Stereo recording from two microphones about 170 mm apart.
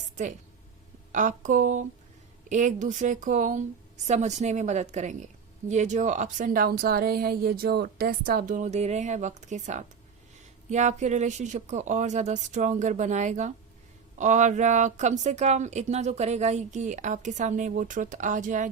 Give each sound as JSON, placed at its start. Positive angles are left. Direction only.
{"t": 1.1, "sound": "speech", "side_deg": -45}